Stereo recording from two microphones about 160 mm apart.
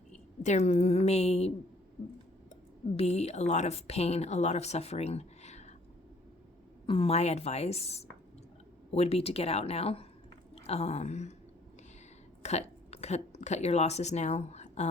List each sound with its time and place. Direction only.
0.4 s a woman's voice: 45° left (ahead or behind)
2.9 s a woman's voice: 40° left (ahead or behind)
6.8 s a woman's voice: 35° left (ahead or behind)
12.4 s speech: 45° left (ahead or behind)